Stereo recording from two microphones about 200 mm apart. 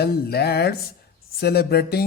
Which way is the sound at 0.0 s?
50° left (ahead or behind).